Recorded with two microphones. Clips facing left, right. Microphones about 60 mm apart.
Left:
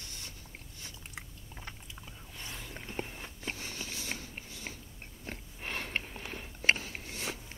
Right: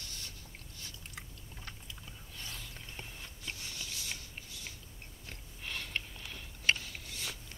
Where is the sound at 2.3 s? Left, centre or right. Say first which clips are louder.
Left 3 dB; left.